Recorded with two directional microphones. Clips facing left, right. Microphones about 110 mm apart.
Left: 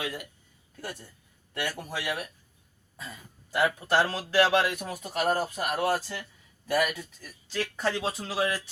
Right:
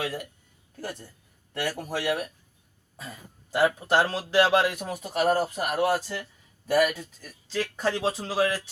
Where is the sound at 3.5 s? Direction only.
30° right (ahead or behind).